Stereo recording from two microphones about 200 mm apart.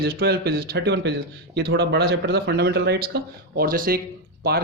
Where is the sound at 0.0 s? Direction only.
50° right (ahead or behind).